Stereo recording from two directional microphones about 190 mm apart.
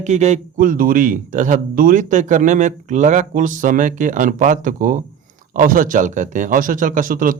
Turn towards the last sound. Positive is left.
turn(degrees=-45)  # may be behind; listen again after turning